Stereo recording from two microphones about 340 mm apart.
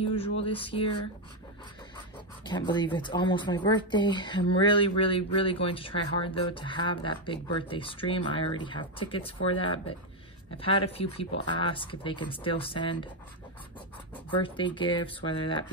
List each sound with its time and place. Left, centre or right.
0.5 s speech: centre
2.4 s speech: centre
14.4 s speech: centre